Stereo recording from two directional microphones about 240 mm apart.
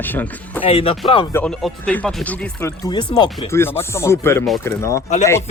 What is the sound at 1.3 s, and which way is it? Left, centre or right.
Speech, centre.